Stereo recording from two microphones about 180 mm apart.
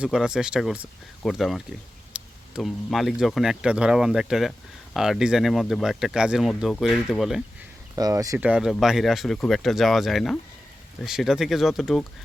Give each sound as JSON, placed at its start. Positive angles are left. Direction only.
{"t": 0.0, "sound": "speech", "side_deg": -5}
{"t": 7.9, "sound": "speech", "side_deg": -20}
{"t": 8.4, "sound": "speech", "side_deg": -5}